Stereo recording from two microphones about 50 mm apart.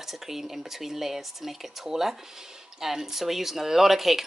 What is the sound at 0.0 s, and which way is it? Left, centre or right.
Speech, centre.